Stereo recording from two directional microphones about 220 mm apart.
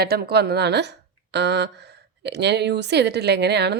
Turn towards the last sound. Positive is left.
turn(degrees=-50)  # may be behind; listen again after turning